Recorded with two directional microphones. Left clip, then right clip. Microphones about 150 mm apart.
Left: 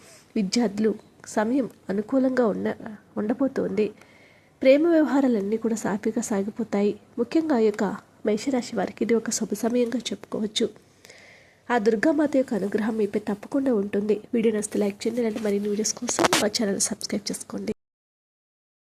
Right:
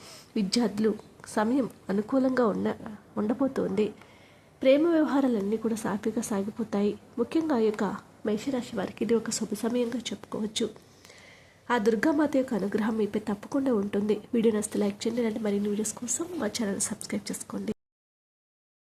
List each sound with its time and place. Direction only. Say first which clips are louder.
0.3 s a woman's voice: left 3 dB; 15° left (ahead or behind)
14.3 s a woman's voice: left 1 dB; 5° left (ahead or behind); by 17.5 s 20° left (ahead or behind)